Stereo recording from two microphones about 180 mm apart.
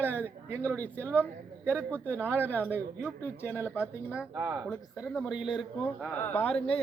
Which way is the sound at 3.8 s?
5° right (ahead or behind).